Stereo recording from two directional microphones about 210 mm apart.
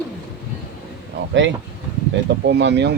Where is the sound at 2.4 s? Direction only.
55° right (ahead or behind).